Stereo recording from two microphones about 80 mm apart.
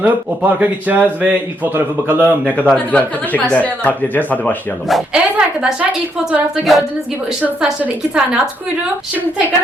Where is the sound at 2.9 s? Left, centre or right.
Centre.